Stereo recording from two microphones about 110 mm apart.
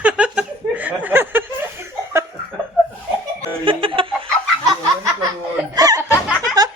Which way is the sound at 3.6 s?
50° right (ahead or behind).